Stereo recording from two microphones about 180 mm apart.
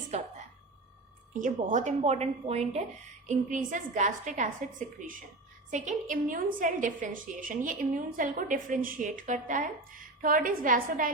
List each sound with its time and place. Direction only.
0.1 s a woman's voice: 35° right (ahead or behind)
1.3 s a woman's voice: 45° right (ahead or behind)